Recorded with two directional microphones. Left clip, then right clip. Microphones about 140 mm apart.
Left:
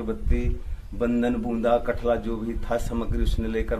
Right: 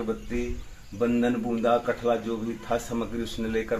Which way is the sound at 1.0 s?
30° left (ahead or behind).